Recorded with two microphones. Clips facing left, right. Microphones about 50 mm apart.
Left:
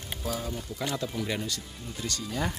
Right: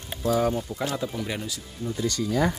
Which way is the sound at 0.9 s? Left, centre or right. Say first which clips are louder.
Right 2 dB; centre.